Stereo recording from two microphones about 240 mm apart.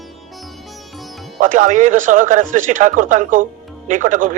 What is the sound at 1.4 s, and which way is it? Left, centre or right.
A man's voice, right.